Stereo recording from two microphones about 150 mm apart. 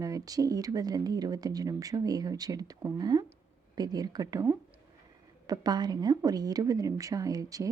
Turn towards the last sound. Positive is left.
turn(degrees=-25)  # may be behind; listen again after turning